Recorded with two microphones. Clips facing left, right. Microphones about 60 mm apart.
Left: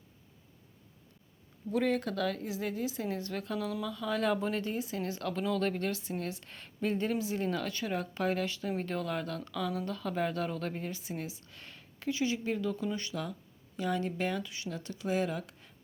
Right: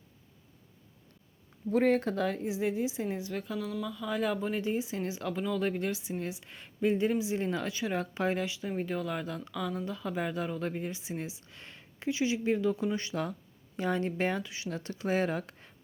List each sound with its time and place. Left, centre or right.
1.7 s speech: right; by 4.6 s centre
4.6 s speech: centre
7.7 s speech: centre
7.9 s speech: right